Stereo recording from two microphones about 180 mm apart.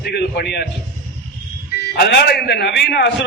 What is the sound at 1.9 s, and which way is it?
A man's voice, 65° left (ahead or behind).